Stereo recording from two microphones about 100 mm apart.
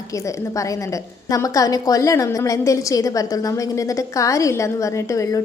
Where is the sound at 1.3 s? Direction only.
35° left (ahead or behind).